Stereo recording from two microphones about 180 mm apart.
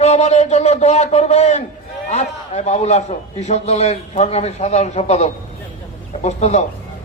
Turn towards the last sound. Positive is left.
turn(degrees=40)  # may be behind; listen again after turning